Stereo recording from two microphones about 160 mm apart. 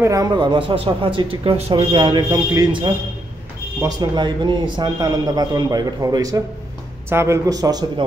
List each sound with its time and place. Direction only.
0.0 s speech: 20° right (ahead or behind)